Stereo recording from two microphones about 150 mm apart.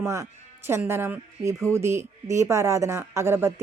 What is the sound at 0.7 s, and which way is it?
Speech, 15° right (ahead or behind).